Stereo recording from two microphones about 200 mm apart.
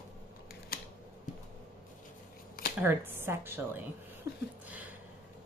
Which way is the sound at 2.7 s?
10° right (ahead or behind).